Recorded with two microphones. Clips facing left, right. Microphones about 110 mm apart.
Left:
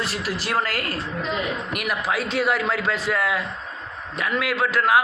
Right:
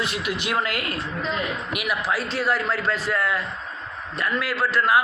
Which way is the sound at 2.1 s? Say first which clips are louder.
Left 3 dB; 60° left (ahead or behind).